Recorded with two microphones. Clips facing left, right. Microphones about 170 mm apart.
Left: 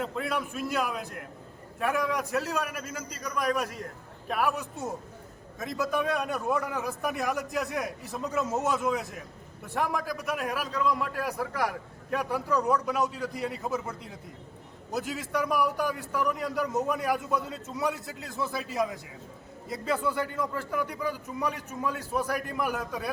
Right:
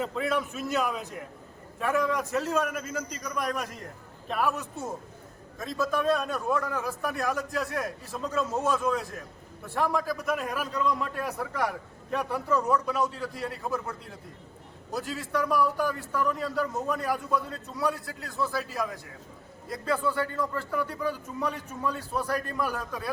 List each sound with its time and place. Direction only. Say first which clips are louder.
0.0 s a man's voice: right 2 dB; centre (ahead or behind); by 13.9 s 20° left (ahead or behind)
14.9 s a man's voice: even; 20° left (ahead or behind)